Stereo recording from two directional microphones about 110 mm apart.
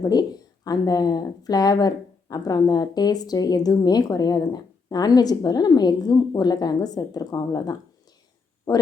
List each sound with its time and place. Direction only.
0.0 s speech: 40° left (ahead or behind)